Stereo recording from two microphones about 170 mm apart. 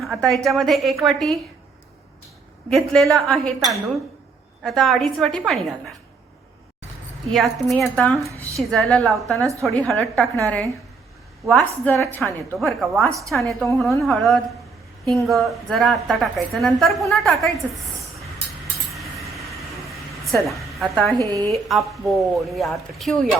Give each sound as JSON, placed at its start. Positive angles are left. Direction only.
{"t": 0.0, "sound": "a woman's voice", "side_deg": 5}
{"t": 2.6, "sound": "a woman's voice", "side_deg": 5}
{"t": 7.3, "sound": "a woman's voice", "side_deg": 0}
{"t": 9.4, "sound": "a woman's voice", "side_deg": -20}
{"t": 9.7, "sound": "a woman's voice", "side_deg": 5}
{"t": 12.5, "sound": "a woman's voice", "side_deg": 0}
{"t": 13.1, "sound": "speech", "side_deg": -20}
{"t": 14.0, "sound": "a woman's voice", "side_deg": 0}
{"t": 18.9, "sound": "a sound", "side_deg": 0}
{"t": 21.2, "sound": "speech", "side_deg": -20}
{"t": 21.7, "sound": "a woman's voice", "side_deg": 0}